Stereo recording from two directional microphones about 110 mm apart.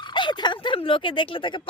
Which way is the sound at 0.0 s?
45° left (ahead or behind).